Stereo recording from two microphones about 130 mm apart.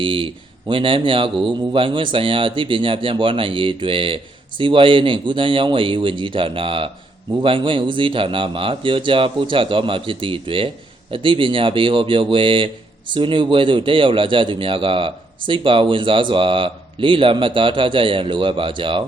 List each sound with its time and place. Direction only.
0.0 s a man's voice: 40° right (ahead or behind)